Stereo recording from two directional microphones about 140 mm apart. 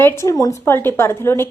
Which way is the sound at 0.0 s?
20° left (ahead or behind).